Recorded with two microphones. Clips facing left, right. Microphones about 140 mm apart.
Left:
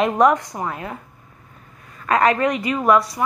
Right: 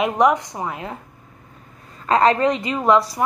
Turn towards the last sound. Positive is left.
turn(degrees=-25)  # may be behind; listen again after turning